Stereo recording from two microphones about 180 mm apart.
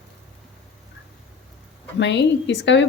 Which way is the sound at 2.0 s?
80° left.